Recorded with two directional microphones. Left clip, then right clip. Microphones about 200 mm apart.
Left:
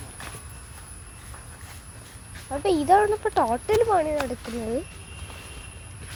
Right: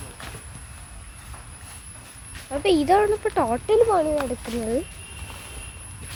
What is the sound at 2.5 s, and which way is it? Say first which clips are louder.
Speech: right 1 dB; centre (ahead or behind).